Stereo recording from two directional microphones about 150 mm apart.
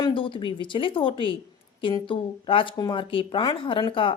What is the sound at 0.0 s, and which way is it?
Speech, 35° left (ahead or behind).